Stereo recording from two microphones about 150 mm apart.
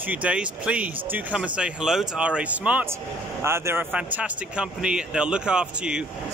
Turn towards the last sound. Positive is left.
turn(degrees=-5)  # may be behind; listen again after turning